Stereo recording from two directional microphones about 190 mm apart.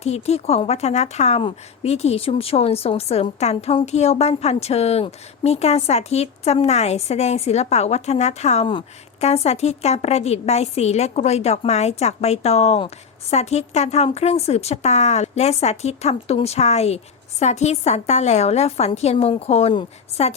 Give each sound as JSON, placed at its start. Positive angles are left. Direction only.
{"t": 0.0, "sound": "a woman's voice", "side_deg": 35}